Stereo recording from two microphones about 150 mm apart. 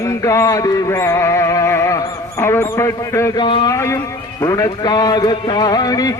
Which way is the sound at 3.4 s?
35° left (ahead or behind).